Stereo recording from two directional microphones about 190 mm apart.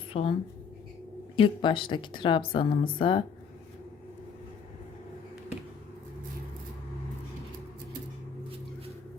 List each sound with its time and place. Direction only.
0.1 s speech: 30° left (ahead or behind)
1.4 s speech: 25° left (ahead or behind)